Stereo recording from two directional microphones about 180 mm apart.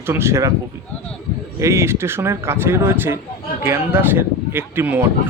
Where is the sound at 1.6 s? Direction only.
15° right (ahead or behind).